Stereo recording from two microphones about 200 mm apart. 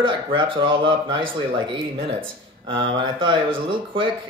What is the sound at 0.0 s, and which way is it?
Speech, 25° right (ahead or behind).